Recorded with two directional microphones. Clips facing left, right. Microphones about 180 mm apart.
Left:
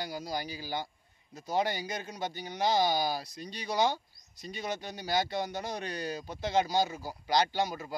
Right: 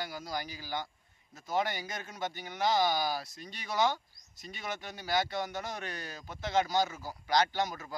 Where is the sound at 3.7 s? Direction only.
15° left (ahead or behind).